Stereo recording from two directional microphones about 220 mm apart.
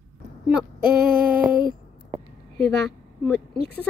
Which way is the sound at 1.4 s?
40° right (ahead or behind).